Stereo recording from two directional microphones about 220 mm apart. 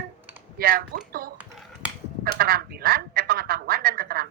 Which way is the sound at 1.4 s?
Centre (ahead or behind).